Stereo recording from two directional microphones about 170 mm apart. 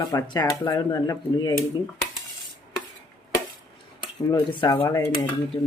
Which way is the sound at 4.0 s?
25° left (ahead or behind).